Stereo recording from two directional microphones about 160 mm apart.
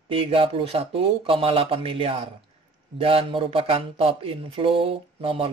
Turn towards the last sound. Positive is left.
turn(degrees=-35)  # may be behind; listen again after turning